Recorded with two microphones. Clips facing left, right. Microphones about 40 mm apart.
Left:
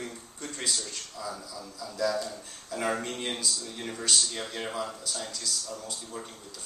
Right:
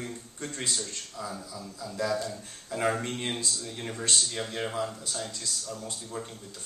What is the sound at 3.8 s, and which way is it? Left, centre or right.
Speech, centre.